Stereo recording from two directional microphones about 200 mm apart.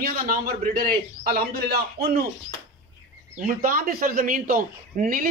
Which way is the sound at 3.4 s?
45° right (ahead or behind).